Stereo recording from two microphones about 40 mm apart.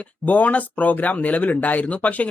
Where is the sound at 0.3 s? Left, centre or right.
Left.